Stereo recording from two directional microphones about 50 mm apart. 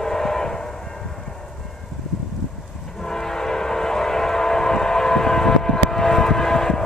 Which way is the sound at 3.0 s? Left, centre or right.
Centre.